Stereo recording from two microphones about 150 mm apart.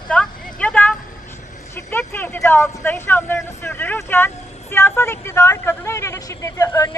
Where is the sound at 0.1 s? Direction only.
5° left (ahead or behind).